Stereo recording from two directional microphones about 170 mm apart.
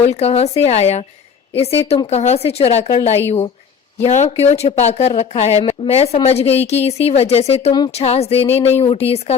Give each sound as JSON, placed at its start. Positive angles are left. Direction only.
{"t": 0.0, "sound": "speech", "side_deg": 40}